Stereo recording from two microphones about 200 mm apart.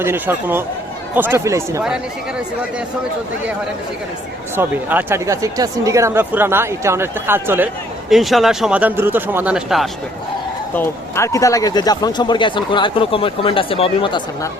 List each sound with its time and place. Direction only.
0.0 s speech: 10° right (ahead or behind)
4.5 s speech: 10° right (ahead or behind)
8.1 s speech: centre (ahead or behind)
10.8 s speech: 15° left (ahead or behind)